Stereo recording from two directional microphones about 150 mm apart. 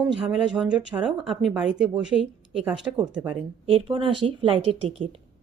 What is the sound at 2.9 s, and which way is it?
Speech, 15° right (ahead or behind).